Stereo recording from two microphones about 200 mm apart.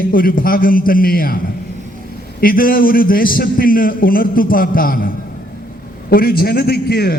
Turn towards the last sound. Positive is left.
turn(degrees=50)  # may be behind; listen again after turning